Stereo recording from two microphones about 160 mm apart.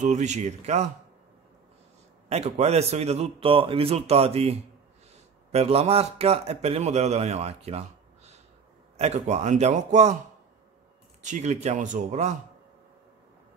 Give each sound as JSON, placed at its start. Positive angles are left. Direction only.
{"t": 0.0, "sound": "speech", "side_deg": -45}
{"t": 2.2, "sound": "a man's voice", "side_deg": -40}
{"t": 11.2, "sound": "speech", "side_deg": -45}